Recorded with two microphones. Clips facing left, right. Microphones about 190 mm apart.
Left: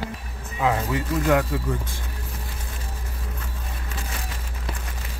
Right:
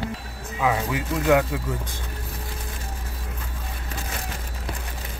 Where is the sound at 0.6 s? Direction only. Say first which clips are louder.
Even; 5° right (ahead or behind).